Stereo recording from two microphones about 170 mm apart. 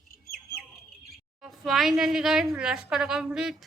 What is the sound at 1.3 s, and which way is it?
A woman's voice, centre (ahead or behind).